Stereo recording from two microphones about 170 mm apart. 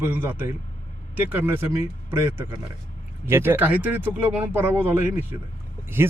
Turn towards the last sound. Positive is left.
turn(degrees=-15)  # may be behind; listen again after turning